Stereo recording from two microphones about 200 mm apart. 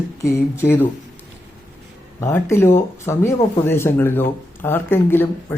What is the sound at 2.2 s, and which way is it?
Speech, 10° left (ahead or behind).